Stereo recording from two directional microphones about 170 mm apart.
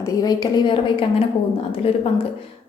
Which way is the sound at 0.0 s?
25° left (ahead or behind).